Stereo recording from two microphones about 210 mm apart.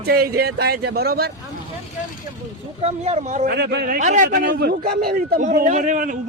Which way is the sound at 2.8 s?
30° right (ahead or behind).